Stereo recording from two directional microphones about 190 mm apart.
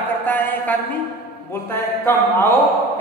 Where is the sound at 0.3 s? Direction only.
10° left (ahead or behind).